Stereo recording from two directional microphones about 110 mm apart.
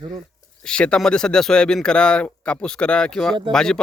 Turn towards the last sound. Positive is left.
turn(degrees=5)  # may be behind; listen again after turning